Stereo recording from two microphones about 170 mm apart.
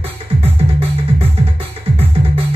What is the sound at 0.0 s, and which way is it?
Music, 35° right (ahead or behind).